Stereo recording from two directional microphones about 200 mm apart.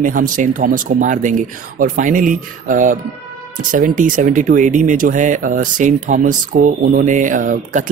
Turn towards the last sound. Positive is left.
turn(degrees=-40)  # may be behind; listen again after turning